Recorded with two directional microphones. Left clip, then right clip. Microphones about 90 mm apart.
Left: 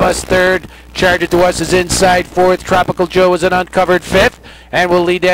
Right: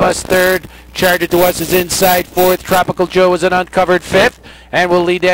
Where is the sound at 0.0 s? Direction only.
35° left (ahead or behind).